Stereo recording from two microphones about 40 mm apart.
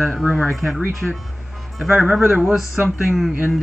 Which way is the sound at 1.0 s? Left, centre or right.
Centre.